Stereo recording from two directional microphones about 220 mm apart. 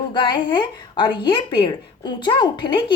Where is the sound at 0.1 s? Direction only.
20° left (ahead or behind).